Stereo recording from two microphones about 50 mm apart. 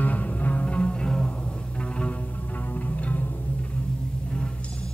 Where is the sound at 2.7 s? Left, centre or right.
Left.